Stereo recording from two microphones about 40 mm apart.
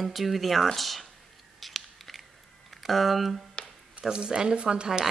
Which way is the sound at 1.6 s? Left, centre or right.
Centre.